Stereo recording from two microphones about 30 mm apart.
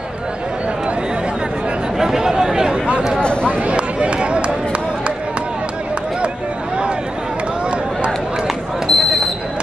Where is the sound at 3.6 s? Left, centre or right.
Right.